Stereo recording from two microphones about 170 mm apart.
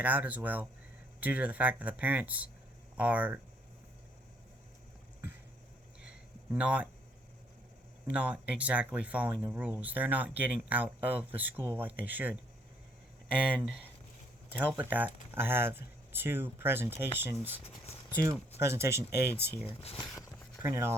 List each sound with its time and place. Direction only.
0.0 s speech: 10° right (ahead or behind)
6.5 s speech: 5° right (ahead or behind)
8.1 s speech: 5° right (ahead or behind)
13.6 s speech: 5° right (ahead or behind)
17.6 s speech: 35° left (ahead or behind)
18.1 s speech: 15° right (ahead or behind)
19.6 s speech: 35° left (ahead or behind)
20.6 s speech: 15° right (ahead or behind)